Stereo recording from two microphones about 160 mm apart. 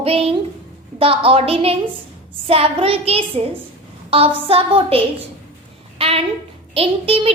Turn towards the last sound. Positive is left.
turn(degrees=-35)  # may be behind; listen again after turning